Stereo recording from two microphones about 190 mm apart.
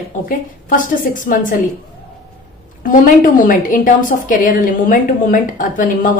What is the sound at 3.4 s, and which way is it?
A woman's voice, 45° left (ahead or behind).